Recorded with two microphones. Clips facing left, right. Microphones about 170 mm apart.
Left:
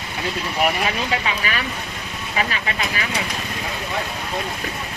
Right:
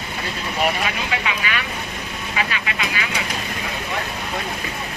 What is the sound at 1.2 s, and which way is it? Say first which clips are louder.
Speech: left 1 dB; 35° left (ahead or behind).